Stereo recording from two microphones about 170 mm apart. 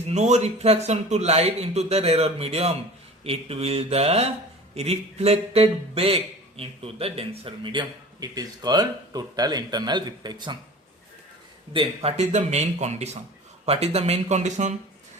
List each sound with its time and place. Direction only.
0.1 s a man's voice: 40° right (ahead or behind); by 10.6 s 25° right (ahead or behind)
11.7 s a man's voice: 35° right (ahead or behind)